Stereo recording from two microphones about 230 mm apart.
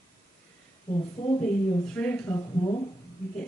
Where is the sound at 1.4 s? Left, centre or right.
Centre.